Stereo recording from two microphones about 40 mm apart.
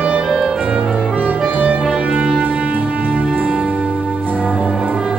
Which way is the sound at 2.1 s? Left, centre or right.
Right.